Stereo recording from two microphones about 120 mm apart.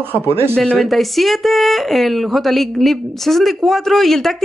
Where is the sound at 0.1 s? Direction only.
20° right (ahead or behind).